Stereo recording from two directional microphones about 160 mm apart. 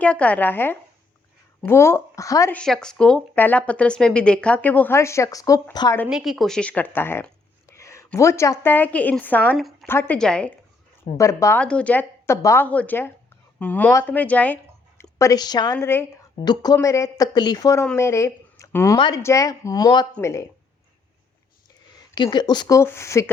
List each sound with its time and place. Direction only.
0.0 s speech: 10° left (ahead or behind)
2.6 s speech: 5° left (ahead or behind); by 6.0 s 20° left (ahead or behind)
6.1 s a woman's voice: 5° right (ahead or behind)
11.2 s speech: 20° left (ahead or behind)
11.6 s speech: 5° left (ahead or behind)
16.4 s speech: 25° left (ahead or behind)
18.9 s speech: 30° left (ahead or behind)
19.2 s speech: 20° left (ahead or behind)
22.1 s speech: 30° left (ahead or behind)